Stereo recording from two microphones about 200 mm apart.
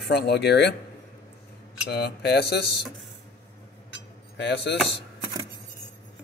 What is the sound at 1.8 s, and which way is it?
Cutlery, 55° left (ahead or behind).